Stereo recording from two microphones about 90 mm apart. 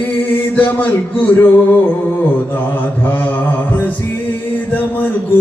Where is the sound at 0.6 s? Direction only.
20° left (ahead or behind).